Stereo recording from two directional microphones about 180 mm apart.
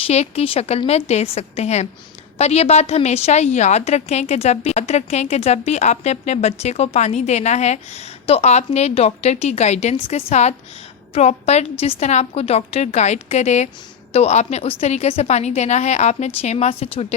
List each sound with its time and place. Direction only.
0.1 s a woman's voice: 35° left (ahead or behind)